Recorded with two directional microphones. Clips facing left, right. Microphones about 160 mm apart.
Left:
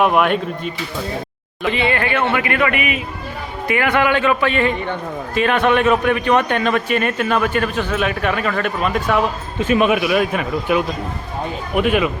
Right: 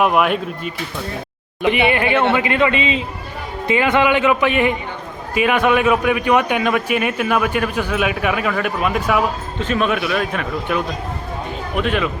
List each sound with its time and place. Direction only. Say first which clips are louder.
0.0 s speech: left 1 dB; centre (ahead or behind)
1.6 s a man's voice: right 3 dB; 20° right (ahead or behind)
9.6 s speech: left 4 dB; 10° left (ahead or behind)